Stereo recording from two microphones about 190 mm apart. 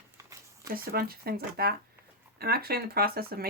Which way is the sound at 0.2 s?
15° right (ahead or behind).